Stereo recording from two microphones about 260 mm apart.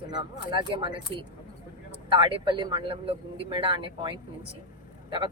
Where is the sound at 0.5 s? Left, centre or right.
Centre.